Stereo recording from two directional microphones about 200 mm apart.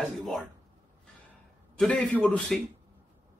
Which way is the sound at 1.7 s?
5° left (ahead or behind).